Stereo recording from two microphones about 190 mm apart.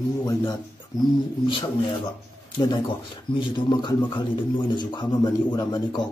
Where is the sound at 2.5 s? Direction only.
25° left (ahead or behind).